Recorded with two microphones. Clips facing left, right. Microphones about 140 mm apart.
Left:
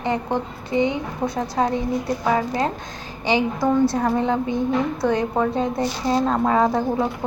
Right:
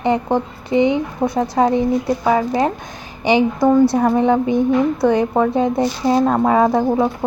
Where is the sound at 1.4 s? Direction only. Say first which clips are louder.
Right 7 dB; 15° right (ahead or behind).